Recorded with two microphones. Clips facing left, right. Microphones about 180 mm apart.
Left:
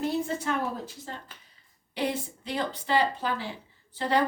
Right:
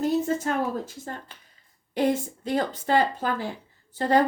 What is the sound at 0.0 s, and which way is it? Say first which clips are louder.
A woman's voice: right 5 dB; 45° right (ahead or behind).